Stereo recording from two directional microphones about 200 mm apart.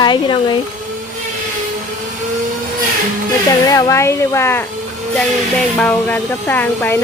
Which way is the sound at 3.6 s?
15° left (ahead or behind).